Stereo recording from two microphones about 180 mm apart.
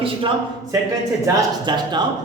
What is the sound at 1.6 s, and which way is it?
Speech, 25° right (ahead or behind).